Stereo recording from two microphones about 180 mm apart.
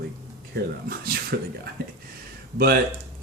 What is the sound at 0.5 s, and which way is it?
Speech, 55° right (ahead or behind).